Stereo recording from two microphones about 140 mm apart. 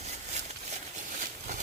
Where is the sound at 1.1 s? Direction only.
65° right (ahead or behind).